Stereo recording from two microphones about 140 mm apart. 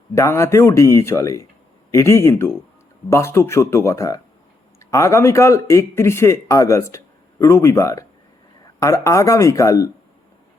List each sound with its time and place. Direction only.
0.1 s speech: 20° left (ahead or behind)